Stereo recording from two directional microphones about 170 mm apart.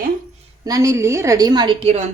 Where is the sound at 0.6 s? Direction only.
20° right (ahead or behind); by 2.0 s 35° right (ahead or behind).